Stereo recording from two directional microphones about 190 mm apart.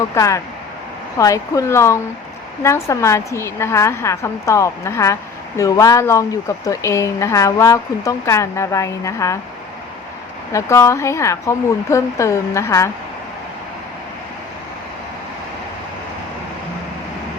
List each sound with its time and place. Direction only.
0.1 s speech: 15° left (ahead or behind)
10.5 s speech: 15° left (ahead or behind)